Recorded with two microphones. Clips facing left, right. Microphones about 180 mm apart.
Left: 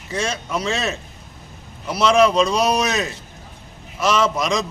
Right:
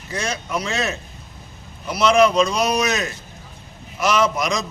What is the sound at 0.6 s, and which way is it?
A man's voice, 30° left (ahead or behind).